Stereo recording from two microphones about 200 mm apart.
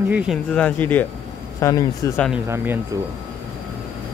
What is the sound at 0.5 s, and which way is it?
Speech, 5° left (ahead or behind).